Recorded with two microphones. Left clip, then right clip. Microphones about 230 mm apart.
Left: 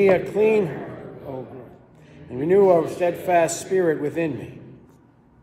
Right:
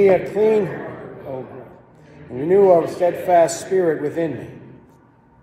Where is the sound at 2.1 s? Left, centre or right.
Centre.